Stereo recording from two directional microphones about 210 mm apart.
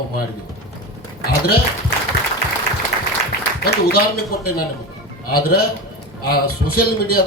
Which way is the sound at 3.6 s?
45° left (ahead or behind).